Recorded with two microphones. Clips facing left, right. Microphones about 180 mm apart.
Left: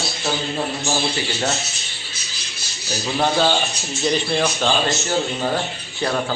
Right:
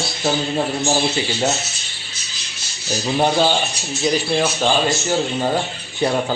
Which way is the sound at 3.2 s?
15° right (ahead or behind).